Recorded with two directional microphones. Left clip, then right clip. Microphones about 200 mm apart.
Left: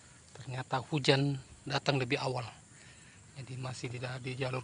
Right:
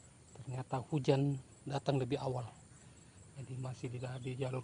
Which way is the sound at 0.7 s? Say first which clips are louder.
Left 5 dB; 5° left (ahead or behind).